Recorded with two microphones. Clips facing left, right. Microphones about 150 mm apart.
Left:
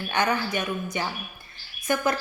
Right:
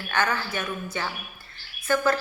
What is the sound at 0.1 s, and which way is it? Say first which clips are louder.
A woman's voice: left 1 dB; 15° left (ahead or behind).